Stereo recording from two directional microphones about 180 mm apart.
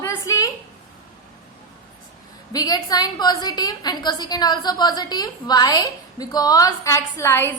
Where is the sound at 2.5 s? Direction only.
20° left (ahead or behind).